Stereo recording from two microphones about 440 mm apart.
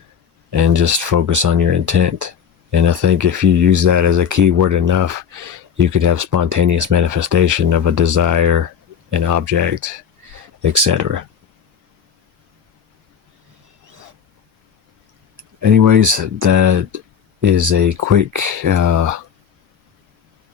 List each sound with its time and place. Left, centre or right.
0.5 s speech: right
15.6 s speech: right